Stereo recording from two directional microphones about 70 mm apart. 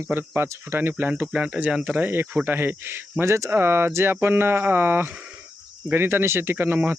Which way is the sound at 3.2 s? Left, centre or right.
Right.